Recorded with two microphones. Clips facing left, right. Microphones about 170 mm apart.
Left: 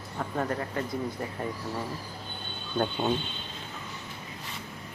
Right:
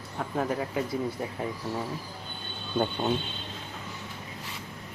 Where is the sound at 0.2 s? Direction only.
5° right (ahead or behind).